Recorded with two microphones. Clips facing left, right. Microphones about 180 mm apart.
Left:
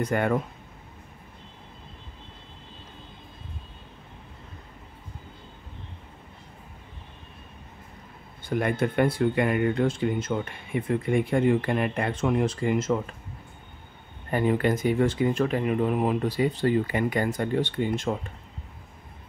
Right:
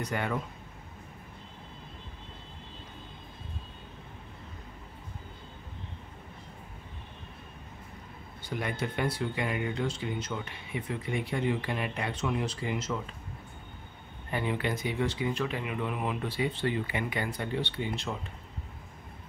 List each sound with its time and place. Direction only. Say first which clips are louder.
0.0 s speech: left 8 dB; 50° left (ahead or behind)
8.5 s speech: left 8 dB; 50° left (ahead or behind)
14.3 s speech: left 8 dB; 45° left (ahead or behind)